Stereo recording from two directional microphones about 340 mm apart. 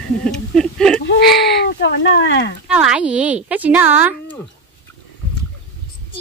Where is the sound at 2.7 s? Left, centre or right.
Centre.